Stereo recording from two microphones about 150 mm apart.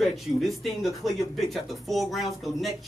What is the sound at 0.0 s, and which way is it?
A man's voice, centre (ahead or behind).